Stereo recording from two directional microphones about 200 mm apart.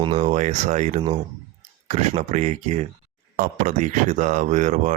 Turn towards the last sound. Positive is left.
turn(degrees=-35)  # may be behind; listen again after turning